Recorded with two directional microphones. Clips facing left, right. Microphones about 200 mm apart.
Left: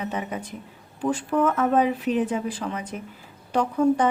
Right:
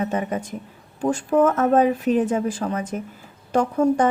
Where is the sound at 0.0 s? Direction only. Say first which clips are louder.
Right 5 dB; 45° right (ahead or behind).